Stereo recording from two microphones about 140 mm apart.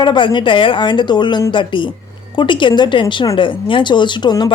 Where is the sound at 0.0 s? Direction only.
35° left (ahead or behind).